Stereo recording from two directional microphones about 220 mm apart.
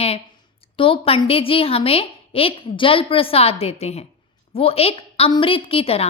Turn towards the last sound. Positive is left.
turn(degrees=25)  # may be behind; listen again after turning